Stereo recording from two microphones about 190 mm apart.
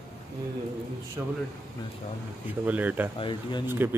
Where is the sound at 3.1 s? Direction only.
25° left (ahead or behind).